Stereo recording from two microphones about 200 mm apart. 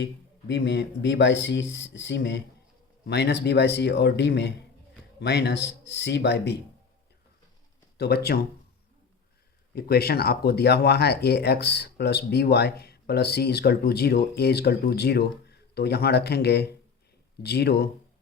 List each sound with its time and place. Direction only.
0.0 s speech: 60° left (ahead or behind)
7.9 s speech: 55° left (ahead or behind)
9.7 s speech: 50° left (ahead or behind)